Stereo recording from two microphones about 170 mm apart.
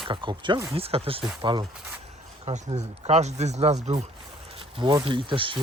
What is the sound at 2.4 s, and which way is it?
Speech, 40° right (ahead or behind).